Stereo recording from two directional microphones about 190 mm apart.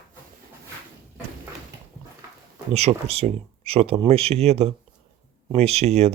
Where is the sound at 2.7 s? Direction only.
35° right (ahead or behind).